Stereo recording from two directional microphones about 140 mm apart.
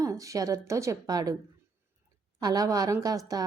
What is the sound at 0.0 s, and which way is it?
Speech, 25° right (ahead or behind).